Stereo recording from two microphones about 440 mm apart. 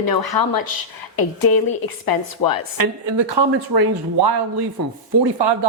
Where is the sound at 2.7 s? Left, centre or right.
Right.